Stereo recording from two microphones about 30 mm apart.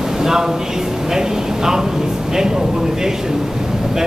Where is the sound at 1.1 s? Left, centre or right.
Centre.